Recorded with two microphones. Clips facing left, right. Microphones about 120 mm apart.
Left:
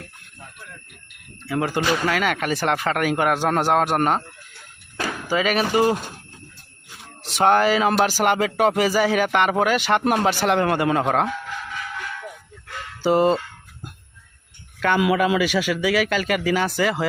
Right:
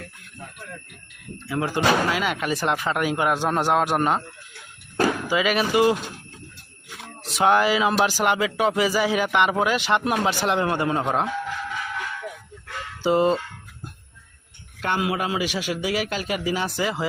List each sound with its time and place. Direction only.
1.5 s speech: 65° left (ahead or behind)
5.3 s speech: 40° left (ahead or behind)
7.2 s speech: 70° left (ahead or behind)
13.0 s caw: 60° left (ahead or behind)
14.8 s a man's voice: 90° left; by 17.1 s 65° left (ahead or behind)